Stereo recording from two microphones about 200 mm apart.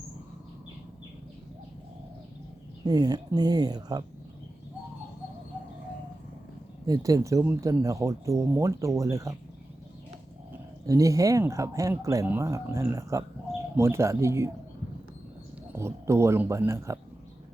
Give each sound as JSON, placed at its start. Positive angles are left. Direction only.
{"t": 2.8, "sound": "speech", "side_deg": -20}
{"t": 6.8, "sound": "speech", "side_deg": -20}
{"t": 10.8, "sound": "speech", "side_deg": -15}
{"t": 15.7, "sound": "speech", "side_deg": -15}